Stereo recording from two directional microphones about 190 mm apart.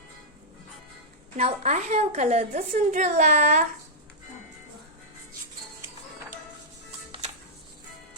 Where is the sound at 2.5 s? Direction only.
45° right (ahead or behind).